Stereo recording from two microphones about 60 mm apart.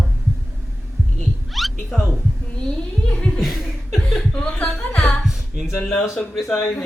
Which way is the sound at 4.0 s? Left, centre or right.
Centre.